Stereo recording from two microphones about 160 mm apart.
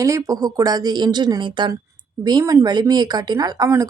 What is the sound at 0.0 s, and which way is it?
Speech, 20° right (ahead or behind).